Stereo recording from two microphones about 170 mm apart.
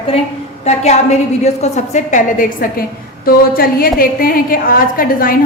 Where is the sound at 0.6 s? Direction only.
40° left (ahead or behind).